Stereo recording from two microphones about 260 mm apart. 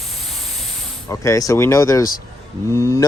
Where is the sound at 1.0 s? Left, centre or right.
Centre.